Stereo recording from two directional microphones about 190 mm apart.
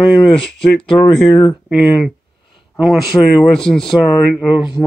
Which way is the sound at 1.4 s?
Centre (ahead or behind).